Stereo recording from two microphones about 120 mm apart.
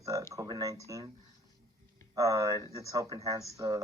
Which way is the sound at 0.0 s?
25° right (ahead or behind).